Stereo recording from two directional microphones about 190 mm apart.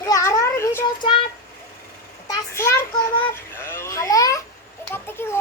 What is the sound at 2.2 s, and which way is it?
Speech, 15° left (ahead or behind).